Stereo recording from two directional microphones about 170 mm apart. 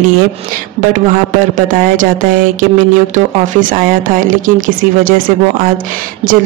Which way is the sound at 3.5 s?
55° right (ahead or behind).